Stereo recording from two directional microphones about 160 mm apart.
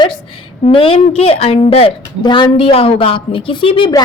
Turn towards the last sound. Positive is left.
turn(degrees=30)  # may be behind; listen again after turning